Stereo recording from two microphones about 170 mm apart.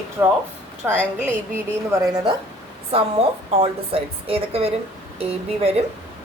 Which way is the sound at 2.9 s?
35° right (ahead or behind).